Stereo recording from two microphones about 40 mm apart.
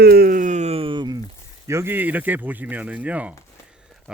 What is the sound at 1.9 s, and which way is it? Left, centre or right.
Speech, right.